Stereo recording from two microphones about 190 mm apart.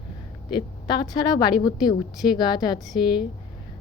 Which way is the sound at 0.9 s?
20° left (ahead or behind).